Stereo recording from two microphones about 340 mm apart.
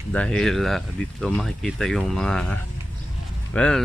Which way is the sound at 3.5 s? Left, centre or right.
Centre.